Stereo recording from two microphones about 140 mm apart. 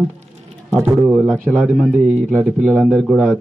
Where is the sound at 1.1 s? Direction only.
5° right (ahead or behind).